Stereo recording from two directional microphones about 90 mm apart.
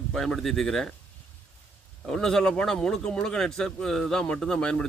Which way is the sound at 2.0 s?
5° left (ahead or behind).